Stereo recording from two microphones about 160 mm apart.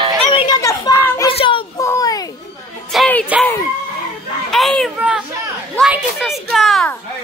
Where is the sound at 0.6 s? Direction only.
20° left (ahead or behind).